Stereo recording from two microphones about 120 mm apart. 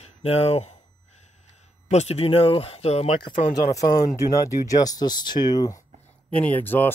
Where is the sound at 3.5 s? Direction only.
30° left (ahead or behind).